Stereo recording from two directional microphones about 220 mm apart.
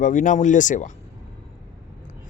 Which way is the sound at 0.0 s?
35° left (ahead or behind).